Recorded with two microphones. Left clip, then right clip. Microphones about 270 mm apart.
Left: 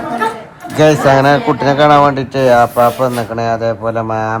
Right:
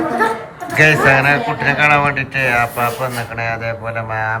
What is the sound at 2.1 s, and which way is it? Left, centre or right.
A man's voice, left.